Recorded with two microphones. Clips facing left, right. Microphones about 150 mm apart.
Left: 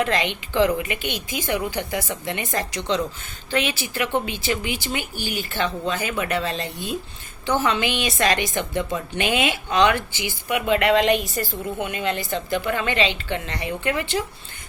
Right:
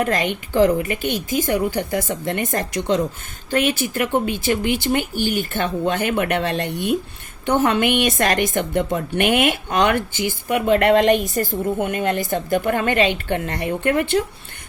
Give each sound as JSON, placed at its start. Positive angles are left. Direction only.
{"t": 0.0, "sound": "a woman's voice", "side_deg": -45}
{"t": 7.4, "sound": "a woman's voice", "side_deg": -55}